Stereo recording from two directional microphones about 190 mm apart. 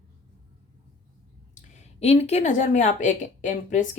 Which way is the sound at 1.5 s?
35° left (ahead or behind).